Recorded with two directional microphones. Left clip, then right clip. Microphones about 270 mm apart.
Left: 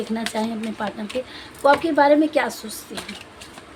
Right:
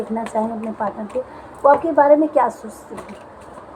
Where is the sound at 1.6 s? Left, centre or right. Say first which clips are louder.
Right 3 dB; left.